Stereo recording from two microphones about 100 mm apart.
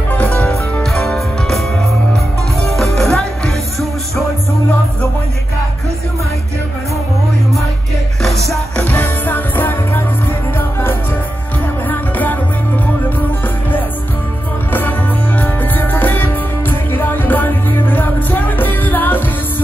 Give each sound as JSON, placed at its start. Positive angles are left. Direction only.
{"t": 0.1, "sound": "music", "side_deg": 15}
{"t": 0.9, "sound": "music", "side_deg": 5}
{"t": 3.0, "sound": "music", "side_deg": 5}
{"t": 8.7, "sound": "music", "side_deg": 15}
{"t": 11.9, "sound": "music", "side_deg": 20}
{"t": 14.7, "sound": "music", "side_deg": 20}